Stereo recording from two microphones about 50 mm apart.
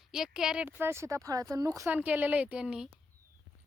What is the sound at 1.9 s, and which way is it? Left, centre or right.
Speech, right.